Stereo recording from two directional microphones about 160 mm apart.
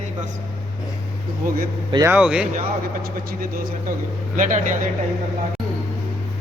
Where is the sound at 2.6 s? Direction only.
65° right (ahead or behind).